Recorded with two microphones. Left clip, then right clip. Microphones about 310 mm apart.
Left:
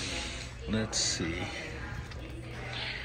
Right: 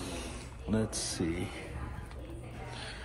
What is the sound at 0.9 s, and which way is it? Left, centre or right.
Speech, right.